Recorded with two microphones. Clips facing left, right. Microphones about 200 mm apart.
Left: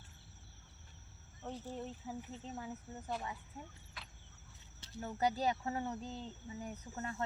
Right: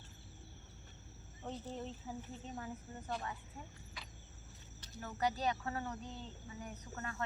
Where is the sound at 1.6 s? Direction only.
10° left (ahead or behind).